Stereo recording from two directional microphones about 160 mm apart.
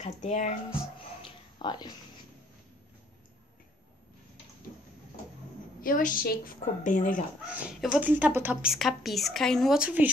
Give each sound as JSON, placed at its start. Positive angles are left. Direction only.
{"t": 0.0, "sound": "speech", "side_deg": 50}
{"t": 1.2, "sound": "a sound", "side_deg": 30}
{"t": 5.8, "sound": "a woman's voice", "side_deg": 60}
{"t": 7.4, "sound": "speech", "side_deg": -10}
{"t": 8.7, "sound": "speech", "side_deg": 0}